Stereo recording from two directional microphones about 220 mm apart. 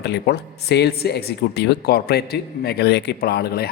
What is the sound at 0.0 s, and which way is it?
Speech, 50° left (ahead or behind).